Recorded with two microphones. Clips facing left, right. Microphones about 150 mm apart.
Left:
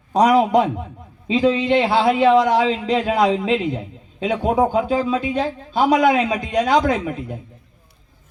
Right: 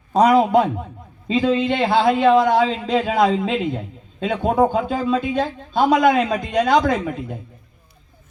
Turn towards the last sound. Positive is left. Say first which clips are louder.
# even
turn(degrees=0)  # may be behind; listen again after turning